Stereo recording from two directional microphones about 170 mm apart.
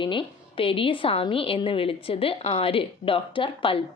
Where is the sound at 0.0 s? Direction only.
30° left (ahead or behind).